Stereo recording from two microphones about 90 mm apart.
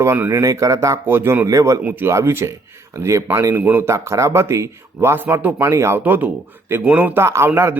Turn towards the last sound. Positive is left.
turn(degrees=-25)  # may be behind; listen again after turning